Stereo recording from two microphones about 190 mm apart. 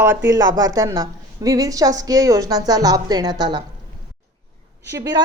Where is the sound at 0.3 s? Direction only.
20° right (ahead or behind).